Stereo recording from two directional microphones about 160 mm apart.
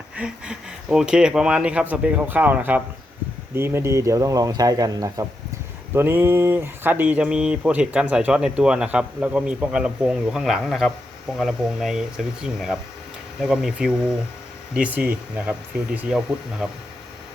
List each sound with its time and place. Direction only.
0.2 s speech: 5° right (ahead or behind)